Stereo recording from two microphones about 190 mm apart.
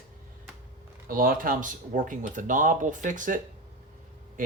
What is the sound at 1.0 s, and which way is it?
Speech, 50° right (ahead or behind).